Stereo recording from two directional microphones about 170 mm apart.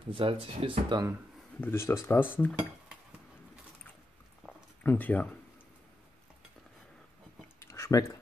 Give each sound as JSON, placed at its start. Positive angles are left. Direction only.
{"t": 0.1, "sound": "speech", "side_deg": -30}
{"t": 1.6, "sound": "speech", "side_deg": 15}
{"t": 4.8, "sound": "speech", "side_deg": 10}
{"t": 7.6, "sound": "a sound", "side_deg": 15}